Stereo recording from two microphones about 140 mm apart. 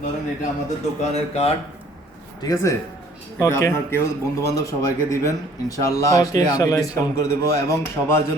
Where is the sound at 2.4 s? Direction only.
20° left (ahead or behind).